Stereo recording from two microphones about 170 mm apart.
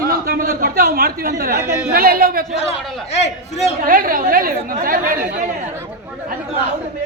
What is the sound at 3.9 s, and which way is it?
Speech, 55° right (ahead or behind).